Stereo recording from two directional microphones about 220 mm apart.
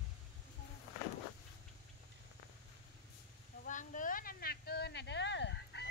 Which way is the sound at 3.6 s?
35° left (ahead or behind).